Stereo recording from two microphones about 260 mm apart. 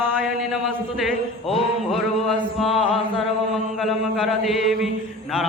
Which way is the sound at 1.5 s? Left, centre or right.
Centre.